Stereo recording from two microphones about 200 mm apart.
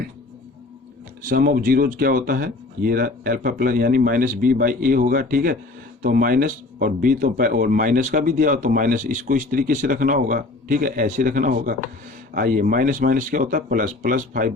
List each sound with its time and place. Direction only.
1.2 s speech: 45° right (ahead or behind)